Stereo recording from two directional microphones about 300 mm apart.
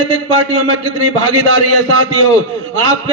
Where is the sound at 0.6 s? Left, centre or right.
Right.